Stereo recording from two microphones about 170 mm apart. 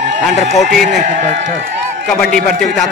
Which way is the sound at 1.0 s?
45° right (ahead or behind).